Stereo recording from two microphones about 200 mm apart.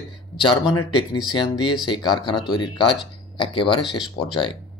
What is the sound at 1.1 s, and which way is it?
Speech, 20° left (ahead or behind).